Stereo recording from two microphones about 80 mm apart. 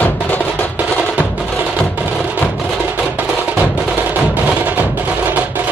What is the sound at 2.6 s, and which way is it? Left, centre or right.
Music, right.